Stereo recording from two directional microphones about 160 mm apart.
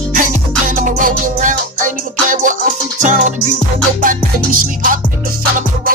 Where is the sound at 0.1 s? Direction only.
55° right (ahead or behind).